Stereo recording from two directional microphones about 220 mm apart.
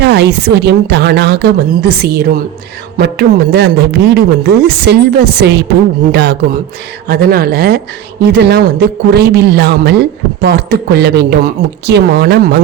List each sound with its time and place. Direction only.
0.0 s a man's voice: 50° right (ahead or behind)